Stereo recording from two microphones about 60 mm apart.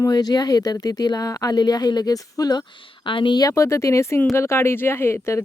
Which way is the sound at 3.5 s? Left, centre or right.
Left.